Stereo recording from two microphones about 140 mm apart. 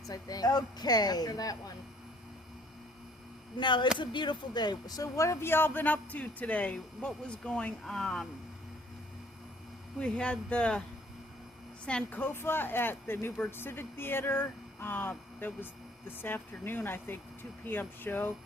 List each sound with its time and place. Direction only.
0.0 s speech: 25° left (ahead or behind)
3.6 s speech: 35° left (ahead or behind); by 8.3 s 5° left (ahead or behind)
10.0 s speech: 5° left (ahead or behind)
11.9 s speech: 10° left (ahead or behind)